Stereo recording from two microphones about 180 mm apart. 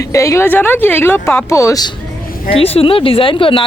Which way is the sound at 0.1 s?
15° left (ahead or behind).